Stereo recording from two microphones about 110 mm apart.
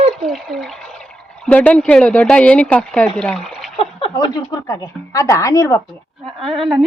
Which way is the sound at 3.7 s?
50° left (ahead or behind).